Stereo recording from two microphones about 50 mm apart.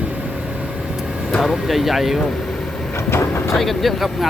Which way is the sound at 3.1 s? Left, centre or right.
Left.